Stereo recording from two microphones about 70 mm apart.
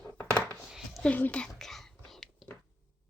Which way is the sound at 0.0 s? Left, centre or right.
Centre.